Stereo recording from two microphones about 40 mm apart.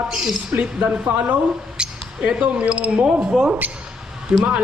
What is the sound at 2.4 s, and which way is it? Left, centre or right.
Speech, right.